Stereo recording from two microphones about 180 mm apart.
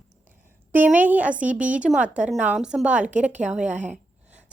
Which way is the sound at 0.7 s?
10° right (ahead or behind).